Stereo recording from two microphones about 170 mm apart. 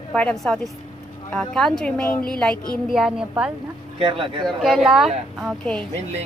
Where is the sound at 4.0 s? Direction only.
30° right (ahead or behind).